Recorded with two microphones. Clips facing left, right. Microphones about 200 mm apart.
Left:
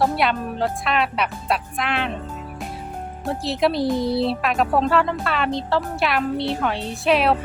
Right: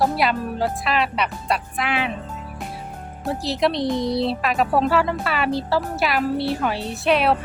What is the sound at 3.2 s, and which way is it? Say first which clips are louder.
Speech: even; centre (ahead or behind).